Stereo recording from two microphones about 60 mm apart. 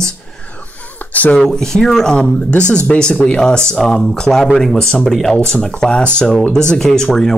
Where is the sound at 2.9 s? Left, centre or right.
Centre.